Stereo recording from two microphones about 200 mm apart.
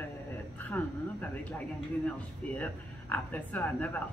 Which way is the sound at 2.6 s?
10° left (ahead or behind).